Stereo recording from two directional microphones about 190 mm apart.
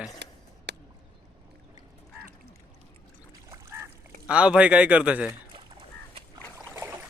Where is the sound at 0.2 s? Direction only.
60° right (ahead or behind).